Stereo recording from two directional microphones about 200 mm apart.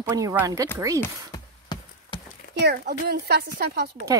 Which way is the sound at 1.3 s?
20° left (ahead or behind).